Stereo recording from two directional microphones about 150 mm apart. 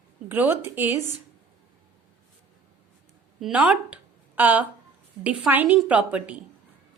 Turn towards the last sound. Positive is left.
turn(degrees=-10)  # may be behind; listen again after turning